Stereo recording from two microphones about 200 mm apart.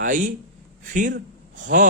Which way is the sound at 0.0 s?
40° right (ahead or behind).